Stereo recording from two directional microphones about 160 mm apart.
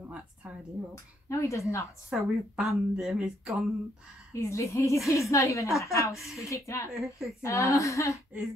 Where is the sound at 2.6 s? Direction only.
5° right (ahead or behind).